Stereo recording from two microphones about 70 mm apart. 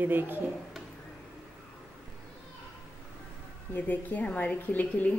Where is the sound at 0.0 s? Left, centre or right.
Right.